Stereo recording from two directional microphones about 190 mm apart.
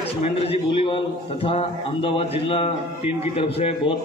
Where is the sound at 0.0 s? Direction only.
30° left (ahead or behind).